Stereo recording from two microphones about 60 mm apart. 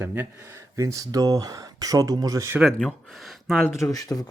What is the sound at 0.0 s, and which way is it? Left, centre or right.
Speech, right.